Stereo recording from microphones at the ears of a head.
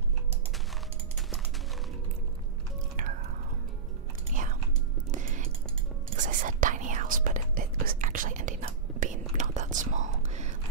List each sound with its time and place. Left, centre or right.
5.1 s music: right
6.0 s whispering: right